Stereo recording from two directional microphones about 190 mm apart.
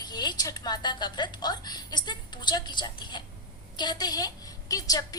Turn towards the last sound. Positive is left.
turn(degrees=20)  # may be behind; listen again after turning